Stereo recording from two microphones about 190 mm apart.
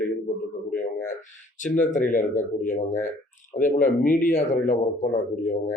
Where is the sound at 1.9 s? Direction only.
45° left (ahead or behind).